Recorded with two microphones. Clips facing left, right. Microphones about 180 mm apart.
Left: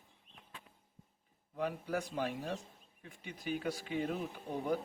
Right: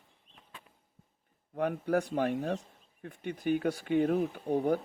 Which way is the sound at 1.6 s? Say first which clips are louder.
Right 7 dB; 60° right (ahead or behind).